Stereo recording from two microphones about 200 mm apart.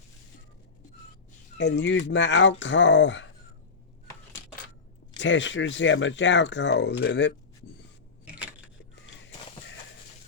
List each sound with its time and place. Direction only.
1.5 s speech: 60° left (ahead or behind)
5.1 s speech: 65° left (ahead or behind)
8.2 s a sound: 5° right (ahead or behind)